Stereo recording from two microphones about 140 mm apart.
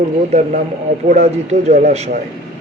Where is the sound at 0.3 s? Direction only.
55° right (ahead or behind).